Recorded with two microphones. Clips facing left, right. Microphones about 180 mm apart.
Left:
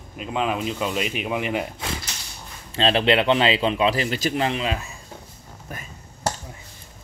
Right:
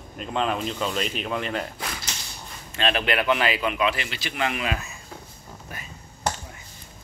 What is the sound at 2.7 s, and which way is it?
A man's voice, 30° left (ahead or behind).